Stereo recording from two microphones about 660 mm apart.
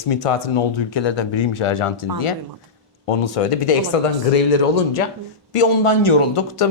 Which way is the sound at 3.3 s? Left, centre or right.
Left.